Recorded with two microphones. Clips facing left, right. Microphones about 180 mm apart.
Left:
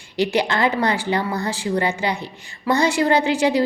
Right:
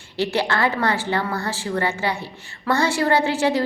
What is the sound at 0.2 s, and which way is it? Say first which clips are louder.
A woman's voice: left 2 dB; 15° left (ahead or behind).